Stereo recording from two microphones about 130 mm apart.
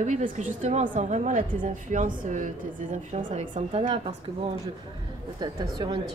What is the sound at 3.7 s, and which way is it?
Speech, 50° right (ahead or behind).